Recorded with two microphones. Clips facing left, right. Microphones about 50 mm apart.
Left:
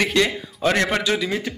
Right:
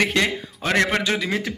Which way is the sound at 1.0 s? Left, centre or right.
Right.